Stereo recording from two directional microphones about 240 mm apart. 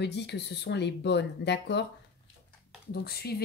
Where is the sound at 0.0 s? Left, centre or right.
Left.